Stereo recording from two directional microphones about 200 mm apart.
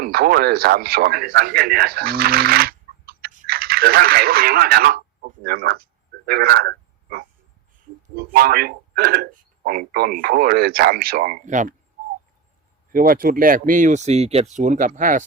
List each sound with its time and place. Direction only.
0.0 s a man's voice: 50° right (ahead or behind)
12.9 s speech: 45° right (ahead or behind)